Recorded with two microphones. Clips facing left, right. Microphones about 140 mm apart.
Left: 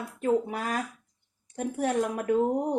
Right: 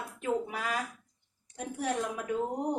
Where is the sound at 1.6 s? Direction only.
55° left (ahead or behind).